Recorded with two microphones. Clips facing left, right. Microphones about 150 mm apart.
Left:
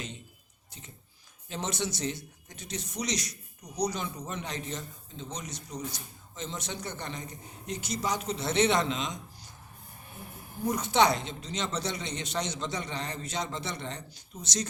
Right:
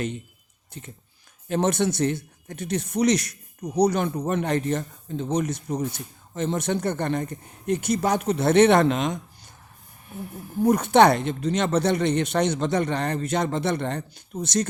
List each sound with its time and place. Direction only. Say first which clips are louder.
0.7 s speech: right 9 dB; 55° right (ahead or behind)
10.6 s speech: right 9 dB; 60° right (ahead or behind)